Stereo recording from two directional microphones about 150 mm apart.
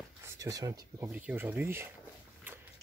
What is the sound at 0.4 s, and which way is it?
Speech, 25° right (ahead or behind).